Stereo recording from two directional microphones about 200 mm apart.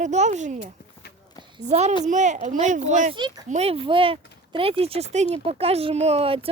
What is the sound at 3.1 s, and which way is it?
Speech, 20° right (ahead or behind).